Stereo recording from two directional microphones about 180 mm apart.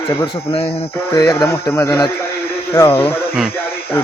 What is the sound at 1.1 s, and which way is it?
A man's voice, 20° left (ahead or behind).